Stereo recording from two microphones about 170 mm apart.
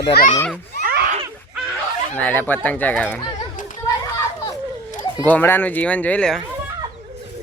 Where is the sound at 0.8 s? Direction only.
65° right (ahead or behind).